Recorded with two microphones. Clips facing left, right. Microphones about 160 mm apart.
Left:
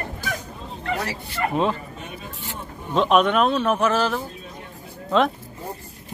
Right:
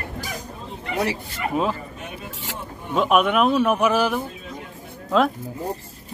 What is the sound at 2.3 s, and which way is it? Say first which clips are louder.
Vehicle: right 1 dB; 90° right.